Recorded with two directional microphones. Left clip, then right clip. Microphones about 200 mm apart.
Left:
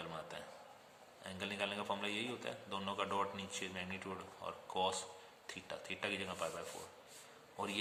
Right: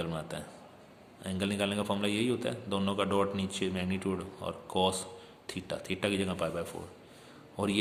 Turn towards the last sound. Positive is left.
turn(degrees=-15)  # may be behind; listen again after turning